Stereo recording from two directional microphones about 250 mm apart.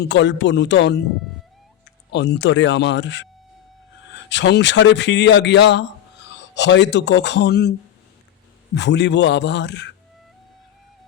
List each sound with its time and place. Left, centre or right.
0.0 s a man's voice: left
2.1 s a man's voice: left
4.3 s a man's voice: left